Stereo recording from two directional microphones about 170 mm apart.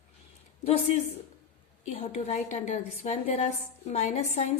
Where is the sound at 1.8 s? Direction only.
40° left (ahead or behind).